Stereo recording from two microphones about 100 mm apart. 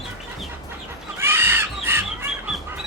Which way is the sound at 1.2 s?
25° right (ahead or behind).